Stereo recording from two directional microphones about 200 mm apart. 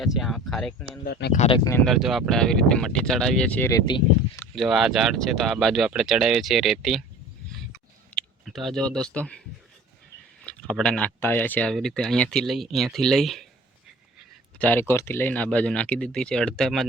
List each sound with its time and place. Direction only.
0.0 s speech: centre (ahead or behind)
1.0 s speech: 55° left (ahead or behind)
1.3 s speech: 30° left (ahead or behind)
1.7 s speech: centre (ahead or behind); by 4.4 s 20° left (ahead or behind)
4.5 s speech: centre (ahead or behind)
7.7 s a sound: centre (ahead or behind)
10.4 s speech: 5° left (ahead or behind)
14.6 s speech: 10° left (ahead or behind)